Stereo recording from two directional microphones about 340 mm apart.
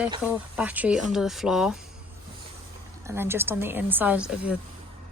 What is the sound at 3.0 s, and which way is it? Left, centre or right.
A woman's voice, centre.